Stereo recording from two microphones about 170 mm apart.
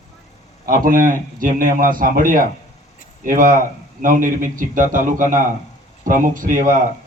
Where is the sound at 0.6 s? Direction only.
55° right (ahead or behind).